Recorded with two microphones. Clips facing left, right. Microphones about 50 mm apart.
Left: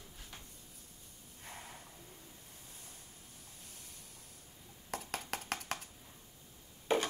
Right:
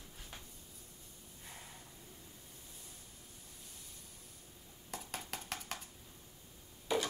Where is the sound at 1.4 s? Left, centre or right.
Left.